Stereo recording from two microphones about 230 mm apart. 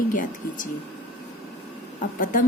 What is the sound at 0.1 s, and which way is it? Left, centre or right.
Speech, left.